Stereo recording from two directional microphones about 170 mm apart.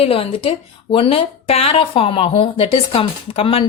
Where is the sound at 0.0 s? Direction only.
35° left (ahead or behind).